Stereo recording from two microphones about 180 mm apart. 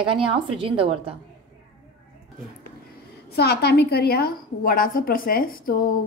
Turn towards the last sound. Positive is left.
turn(degrees=50)  # may be behind; listen again after turning